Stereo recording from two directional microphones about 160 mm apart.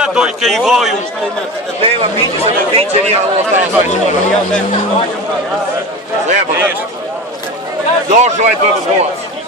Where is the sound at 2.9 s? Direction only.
45° right (ahead or behind).